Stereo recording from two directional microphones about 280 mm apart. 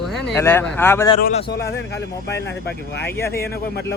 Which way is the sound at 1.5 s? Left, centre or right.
Left.